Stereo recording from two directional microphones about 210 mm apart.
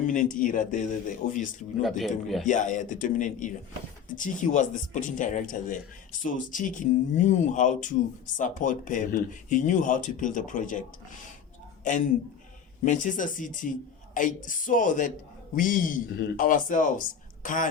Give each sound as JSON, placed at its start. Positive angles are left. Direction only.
{"t": 0.1, "sound": "speech", "side_deg": 40}
{"t": 1.8, "sound": "speech", "side_deg": 0}
{"t": 2.4, "sound": "a man's voice", "side_deg": 35}